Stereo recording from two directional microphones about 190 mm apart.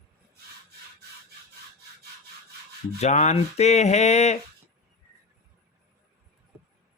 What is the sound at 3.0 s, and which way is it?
Speech, 35° left (ahead or behind).